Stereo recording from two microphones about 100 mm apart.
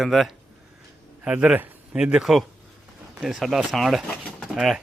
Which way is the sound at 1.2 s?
10° right (ahead or behind).